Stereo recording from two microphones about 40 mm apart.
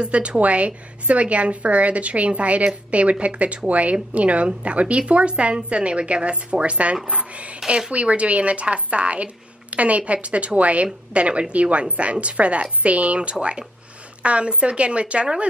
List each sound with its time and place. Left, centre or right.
0.0 s a woman's voice: right